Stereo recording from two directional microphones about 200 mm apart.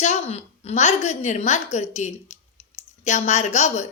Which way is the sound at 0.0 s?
35° left (ahead or behind).